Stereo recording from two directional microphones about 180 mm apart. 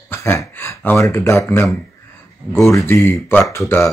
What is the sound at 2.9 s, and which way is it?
Speech, 15° left (ahead or behind).